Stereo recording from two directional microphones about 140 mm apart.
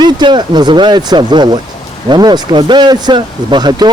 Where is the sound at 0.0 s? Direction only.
30° right (ahead or behind).